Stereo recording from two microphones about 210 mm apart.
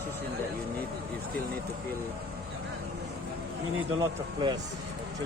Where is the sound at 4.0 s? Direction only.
20° right (ahead or behind).